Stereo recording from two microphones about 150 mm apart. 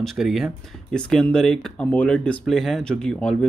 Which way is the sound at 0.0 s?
Centre (ahead or behind).